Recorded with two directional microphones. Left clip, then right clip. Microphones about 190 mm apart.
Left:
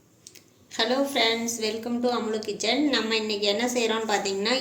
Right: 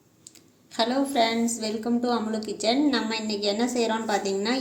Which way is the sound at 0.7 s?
45° right (ahead or behind).